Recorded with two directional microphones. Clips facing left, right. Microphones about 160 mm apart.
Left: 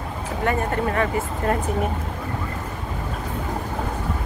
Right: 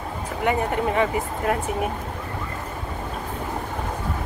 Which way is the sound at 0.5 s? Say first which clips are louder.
Right 1 dB; 15° right (ahead or behind).